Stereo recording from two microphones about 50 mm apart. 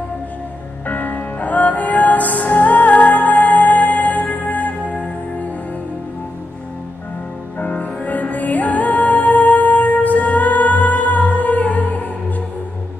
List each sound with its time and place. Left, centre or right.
0.8 s music: left
7.5 s music: left